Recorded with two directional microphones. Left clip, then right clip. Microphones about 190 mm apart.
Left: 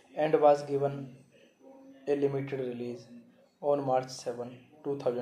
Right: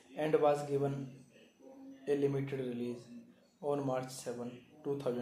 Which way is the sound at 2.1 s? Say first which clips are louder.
Left 4 dB; 10° left (ahead or behind).